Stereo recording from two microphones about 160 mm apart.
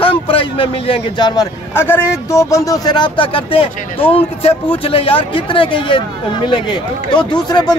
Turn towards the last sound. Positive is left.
turn(degrees=25)  # may be behind; listen again after turning